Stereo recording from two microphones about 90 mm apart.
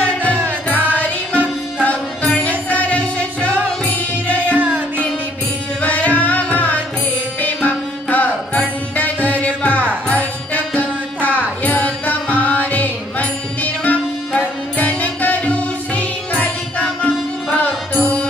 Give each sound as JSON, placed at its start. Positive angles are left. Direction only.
{"t": 0.2, "sound": "music", "side_deg": -20}
{"t": 0.7, "sound": "music", "side_deg": 20}
{"t": 4.5, "sound": "music", "side_deg": -20}
{"t": 5.8, "sound": "music", "side_deg": 15}